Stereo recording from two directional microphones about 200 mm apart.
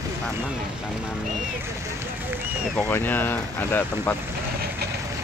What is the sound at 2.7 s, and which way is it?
Speech, 10° left (ahead or behind).